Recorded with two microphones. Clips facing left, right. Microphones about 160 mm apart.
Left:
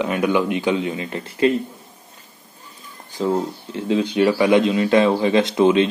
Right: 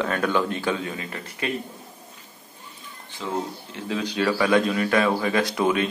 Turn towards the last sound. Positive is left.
turn(degrees=25)  # may be behind; listen again after turning